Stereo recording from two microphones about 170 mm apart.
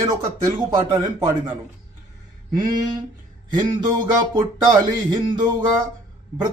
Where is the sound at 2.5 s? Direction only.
25° right (ahead or behind).